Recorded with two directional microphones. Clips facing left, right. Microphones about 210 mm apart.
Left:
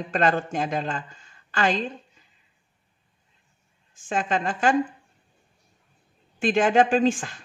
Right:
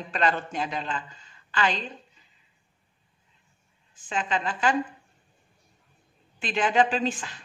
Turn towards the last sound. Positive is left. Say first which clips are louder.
# left 7 dB
turn(degrees=45)  # may be behind; listen again after turning